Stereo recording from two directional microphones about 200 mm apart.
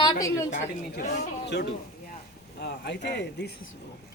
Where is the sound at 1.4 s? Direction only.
60° left (ahead or behind).